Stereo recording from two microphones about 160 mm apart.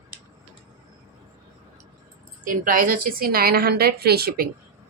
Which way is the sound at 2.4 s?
60° right (ahead or behind).